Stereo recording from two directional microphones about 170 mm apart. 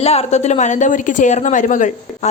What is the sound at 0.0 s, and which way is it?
A woman's voice, 35° left (ahead or behind).